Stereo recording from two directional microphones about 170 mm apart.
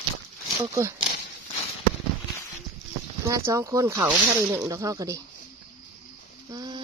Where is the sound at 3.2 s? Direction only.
20° right (ahead or behind).